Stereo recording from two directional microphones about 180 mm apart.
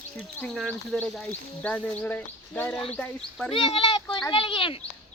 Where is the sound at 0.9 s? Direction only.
Centre (ahead or behind).